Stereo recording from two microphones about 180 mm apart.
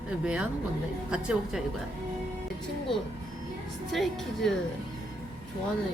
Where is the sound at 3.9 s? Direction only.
Centre (ahead or behind).